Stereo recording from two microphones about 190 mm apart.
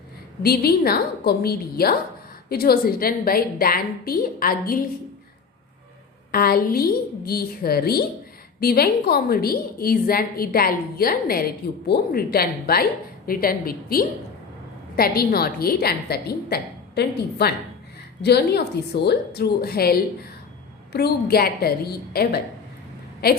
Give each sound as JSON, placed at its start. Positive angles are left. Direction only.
{"t": 0.4, "sound": "a woman's voice", "side_deg": 55}
{"t": 6.3, "sound": "a woman's voice", "side_deg": 50}